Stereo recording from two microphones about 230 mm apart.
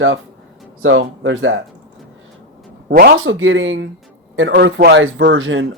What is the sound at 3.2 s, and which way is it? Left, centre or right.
Speech, right.